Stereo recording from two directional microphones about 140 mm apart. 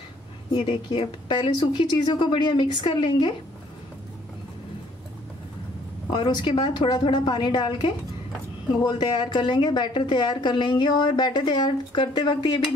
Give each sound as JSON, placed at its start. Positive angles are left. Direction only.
{"t": 0.6, "sound": "a woman's voice", "side_deg": 35}
{"t": 6.0, "sound": "a woman's voice", "side_deg": 35}